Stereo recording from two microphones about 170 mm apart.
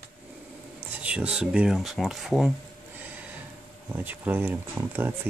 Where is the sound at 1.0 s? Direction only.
5° right (ahead or behind).